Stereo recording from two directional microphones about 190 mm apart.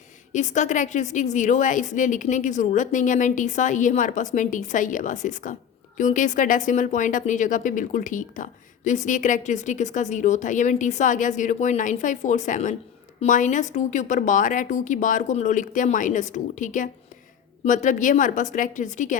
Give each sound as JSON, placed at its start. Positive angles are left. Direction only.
{"t": 0.3, "sound": "speech", "side_deg": 40}